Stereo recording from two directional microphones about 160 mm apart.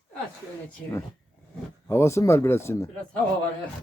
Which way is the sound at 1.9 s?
15° left (ahead or behind).